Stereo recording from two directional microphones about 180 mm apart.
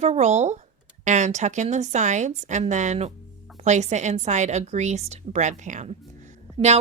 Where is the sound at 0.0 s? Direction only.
40° right (ahead or behind).